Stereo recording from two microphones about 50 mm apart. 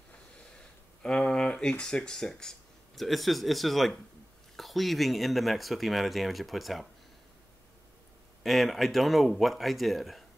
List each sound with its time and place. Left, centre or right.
1.0 s speech: centre
3.0 s speech: centre
8.4 s speech: centre